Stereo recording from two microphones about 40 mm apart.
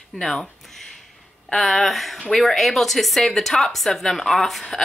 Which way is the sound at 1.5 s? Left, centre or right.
Centre.